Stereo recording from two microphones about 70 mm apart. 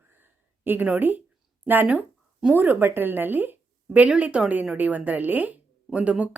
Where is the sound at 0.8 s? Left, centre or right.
Right.